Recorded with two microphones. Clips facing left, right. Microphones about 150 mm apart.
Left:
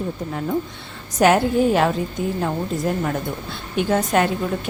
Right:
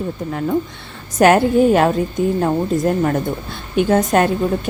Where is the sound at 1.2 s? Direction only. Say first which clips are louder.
Right 4 dB; 55° right (ahead or behind).